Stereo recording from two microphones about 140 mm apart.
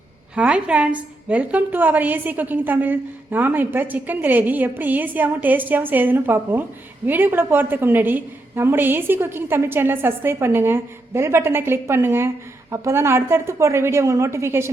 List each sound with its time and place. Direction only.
0.3 s a woman's voice: 10° right (ahead or behind)